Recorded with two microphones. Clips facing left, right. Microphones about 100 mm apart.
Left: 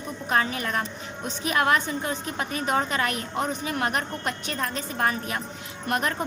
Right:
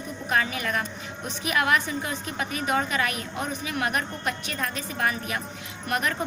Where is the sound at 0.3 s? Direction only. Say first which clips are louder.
Left 1 dB; 35° left (ahead or behind).